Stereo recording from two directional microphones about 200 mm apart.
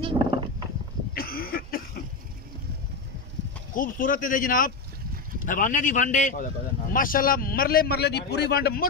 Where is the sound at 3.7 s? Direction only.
45° left (ahead or behind).